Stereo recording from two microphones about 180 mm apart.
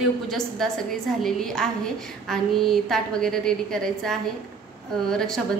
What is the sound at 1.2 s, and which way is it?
A woman's voice, centre (ahead or behind).